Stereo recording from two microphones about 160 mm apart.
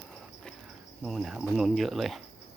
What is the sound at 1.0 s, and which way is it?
Cricket, 5° right (ahead or behind).